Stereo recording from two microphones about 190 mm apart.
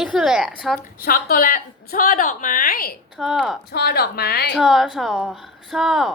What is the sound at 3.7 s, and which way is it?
Speech, 55° left (ahead or behind).